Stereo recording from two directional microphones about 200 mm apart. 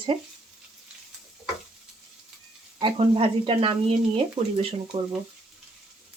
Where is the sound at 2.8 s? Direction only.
25° right (ahead or behind).